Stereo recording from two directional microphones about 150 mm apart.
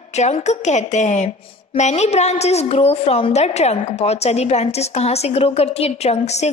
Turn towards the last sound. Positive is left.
turn(degrees=45)  # may be behind; listen again after turning